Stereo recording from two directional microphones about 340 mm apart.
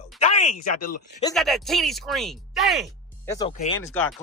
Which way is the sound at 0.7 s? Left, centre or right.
Left.